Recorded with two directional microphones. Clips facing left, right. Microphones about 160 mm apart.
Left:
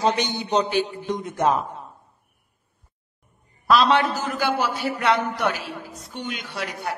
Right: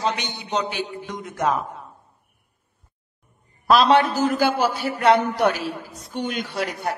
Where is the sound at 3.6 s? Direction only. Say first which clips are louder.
Right 2 dB; 45° right (ahead or behind).